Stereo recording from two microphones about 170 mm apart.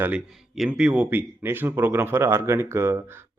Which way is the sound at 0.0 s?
5° right (ahead or behind).